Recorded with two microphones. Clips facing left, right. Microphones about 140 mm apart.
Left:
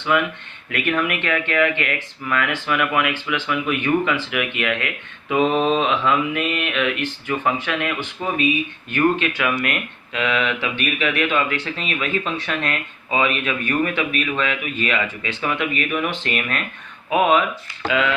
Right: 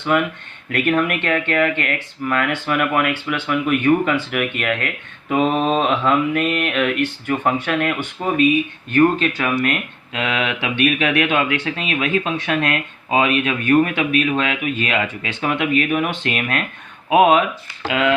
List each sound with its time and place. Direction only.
0.1 s speech: 45° right (ahead or behind)